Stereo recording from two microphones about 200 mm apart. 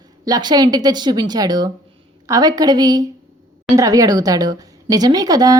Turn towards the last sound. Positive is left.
turn(degrees=-20)  # may be behind; listen again after turning